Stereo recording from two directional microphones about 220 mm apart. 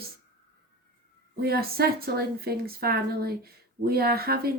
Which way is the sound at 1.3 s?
45° right (ahead or behind).